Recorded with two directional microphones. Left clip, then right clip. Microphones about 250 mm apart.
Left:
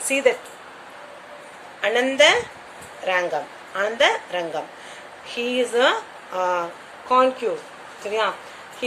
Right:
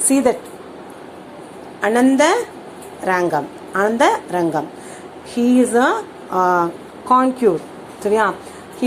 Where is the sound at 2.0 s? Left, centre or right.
Centre.